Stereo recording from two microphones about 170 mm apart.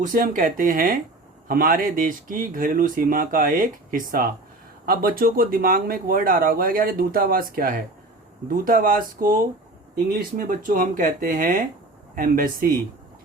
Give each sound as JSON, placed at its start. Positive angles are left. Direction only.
{"t": 0.0, "sound": "speech", "side_deg": -55}